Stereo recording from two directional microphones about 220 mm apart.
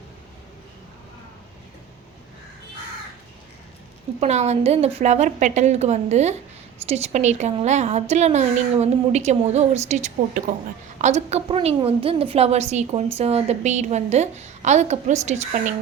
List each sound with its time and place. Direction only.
4.2 s a woman's voice: 30° right (ahead or behind)